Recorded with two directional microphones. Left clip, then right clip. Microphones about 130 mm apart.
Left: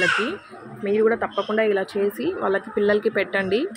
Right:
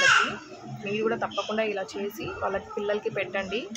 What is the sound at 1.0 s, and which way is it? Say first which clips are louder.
Speech: left 6 dB; 30° left (ahead or behind).